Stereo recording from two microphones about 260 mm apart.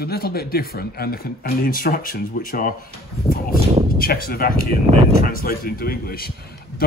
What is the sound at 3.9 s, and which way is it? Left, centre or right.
Speech, left.